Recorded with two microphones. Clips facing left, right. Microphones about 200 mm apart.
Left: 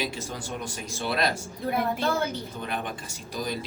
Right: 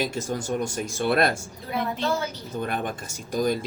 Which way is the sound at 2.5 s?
50° right (ahead or behind).